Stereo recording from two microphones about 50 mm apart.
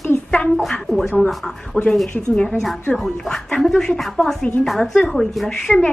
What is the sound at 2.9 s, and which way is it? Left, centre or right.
Speech, centre.